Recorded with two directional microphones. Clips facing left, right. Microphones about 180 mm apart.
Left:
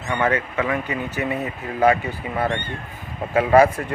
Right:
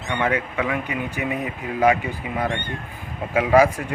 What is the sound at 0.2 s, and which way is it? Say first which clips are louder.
Speech: left 1 dB; 10° right (ahead or behind).